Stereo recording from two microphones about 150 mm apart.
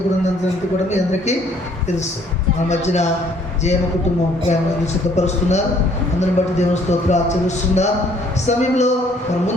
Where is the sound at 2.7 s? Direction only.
50° left (ahead or behind).